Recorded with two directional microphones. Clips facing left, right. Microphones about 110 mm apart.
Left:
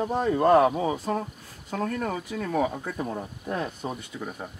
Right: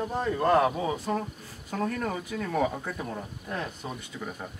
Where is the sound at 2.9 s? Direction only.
15° left (ahead or behind).